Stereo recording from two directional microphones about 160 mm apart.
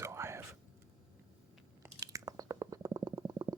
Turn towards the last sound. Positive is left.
turn(degrees=-20)  # may be behind; listen again after turning